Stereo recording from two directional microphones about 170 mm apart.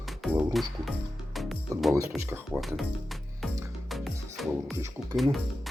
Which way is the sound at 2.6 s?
Centre (ahead or behind).